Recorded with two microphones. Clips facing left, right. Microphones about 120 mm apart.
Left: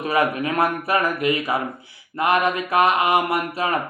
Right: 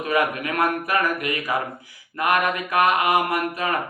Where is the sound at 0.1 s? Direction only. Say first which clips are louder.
Left 2 dB; 30° left (ahead or behind).